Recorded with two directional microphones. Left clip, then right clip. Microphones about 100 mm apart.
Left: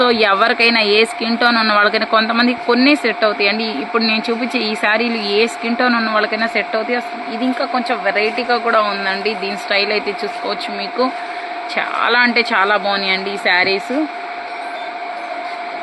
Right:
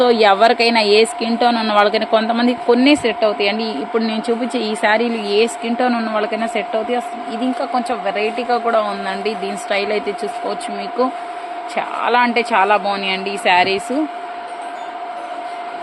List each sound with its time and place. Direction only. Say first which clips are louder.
0.0 s a woman's voice: right 1 dB; 25° right (ahead or behind)
11.7 s a woman's voice: left 1 dB; 15° right (ahead or behind); by 13.8 s 35° right (ahead or behind)